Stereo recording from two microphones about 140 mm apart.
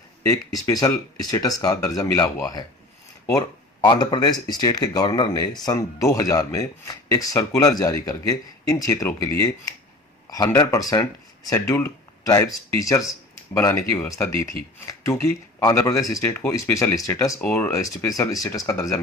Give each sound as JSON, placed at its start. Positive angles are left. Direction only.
{"t": 0.3, "sound": "speech", "side_deg": 25}